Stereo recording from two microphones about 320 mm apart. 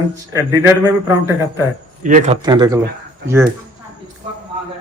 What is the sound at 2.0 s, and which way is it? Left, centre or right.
Speech, right.